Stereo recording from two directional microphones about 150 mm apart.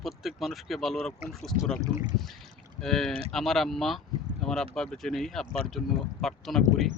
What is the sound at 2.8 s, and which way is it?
Speech, centre (ahead or behind).